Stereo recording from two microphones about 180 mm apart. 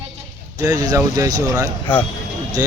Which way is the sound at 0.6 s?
20° right (ahead or behind).